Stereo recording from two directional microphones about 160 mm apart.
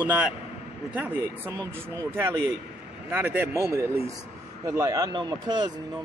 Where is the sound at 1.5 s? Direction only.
15° right (ahead or behind).